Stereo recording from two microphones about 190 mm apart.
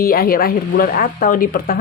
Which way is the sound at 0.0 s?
50° left (ahead or behind).